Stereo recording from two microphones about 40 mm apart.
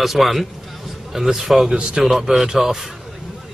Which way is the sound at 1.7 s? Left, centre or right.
Centre.